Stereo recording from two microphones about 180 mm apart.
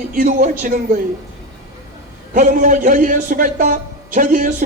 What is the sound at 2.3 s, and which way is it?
A man's voice, 45° right (ahead or behind).